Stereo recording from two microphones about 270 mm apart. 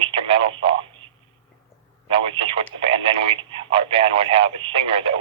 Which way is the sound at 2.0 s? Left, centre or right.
Centre.